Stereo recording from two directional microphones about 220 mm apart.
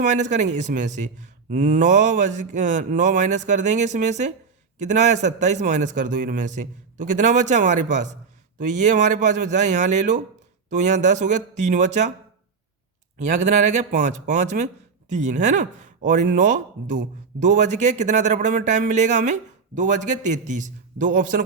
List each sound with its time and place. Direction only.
0.0 s speech: 30° right (ahead or behind)
13.1 s speech: 35° right (ahead or behind)